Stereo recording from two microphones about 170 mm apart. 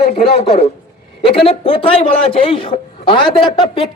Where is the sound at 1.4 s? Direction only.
35° left (ahead or behind).